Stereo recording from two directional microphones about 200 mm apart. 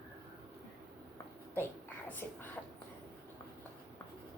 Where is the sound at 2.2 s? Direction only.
5° left (ahead or behind).